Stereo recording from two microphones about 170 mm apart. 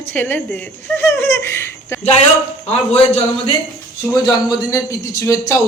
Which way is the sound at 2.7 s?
35° left (ahead or behind).